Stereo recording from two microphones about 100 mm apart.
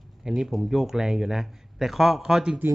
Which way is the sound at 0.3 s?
5° right (ahead or behind).